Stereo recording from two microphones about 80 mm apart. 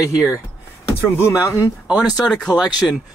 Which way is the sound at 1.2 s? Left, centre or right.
Left.